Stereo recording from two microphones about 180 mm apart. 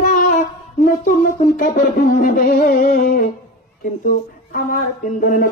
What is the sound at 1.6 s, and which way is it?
Speech, 50° left (ahead or behind).